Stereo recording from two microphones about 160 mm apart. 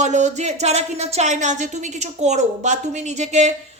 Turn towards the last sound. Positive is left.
turn(degrees=-45)  # may be behind; listen again after turning